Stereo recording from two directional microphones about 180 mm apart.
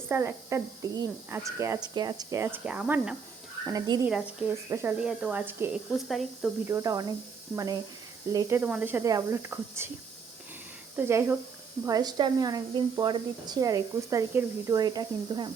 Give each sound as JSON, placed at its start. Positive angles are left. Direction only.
{"t": 0.1, "sound": "speech", "side_deg": -15}
{"t": 3.7, "sound": "speech", "side_deg": -20}
{"t": 4.0, "sound": "speech", "side_deg": -5}
{"t": 6.1, "sound": "speech", "side_deg": 0}
{"t": 6.7, "sound": "speech", "side_deg": -15}
{"t": 10.9, "sound": "speech", "side_deg": -10}